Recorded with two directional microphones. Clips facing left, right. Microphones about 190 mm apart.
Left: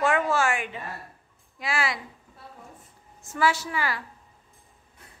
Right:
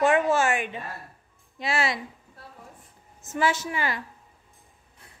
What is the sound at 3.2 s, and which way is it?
Speech, 20° right (ahead or behind).